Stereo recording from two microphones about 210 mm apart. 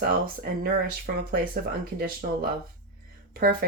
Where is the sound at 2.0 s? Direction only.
45° right (ahead or behind).